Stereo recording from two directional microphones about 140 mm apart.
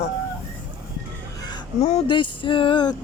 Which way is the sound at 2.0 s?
35° left (ahead or behind).